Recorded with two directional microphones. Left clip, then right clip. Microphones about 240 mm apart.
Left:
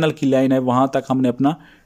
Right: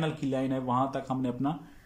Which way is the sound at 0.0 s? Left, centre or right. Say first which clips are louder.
Left 14 dB; left.